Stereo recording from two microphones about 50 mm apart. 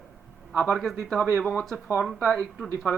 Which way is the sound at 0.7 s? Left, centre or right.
Centre.